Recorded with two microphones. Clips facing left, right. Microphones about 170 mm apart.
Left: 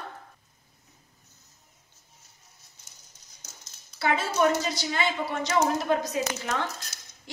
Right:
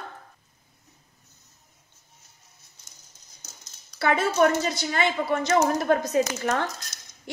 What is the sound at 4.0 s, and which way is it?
A woman's voice, 55° right (ahead or behind).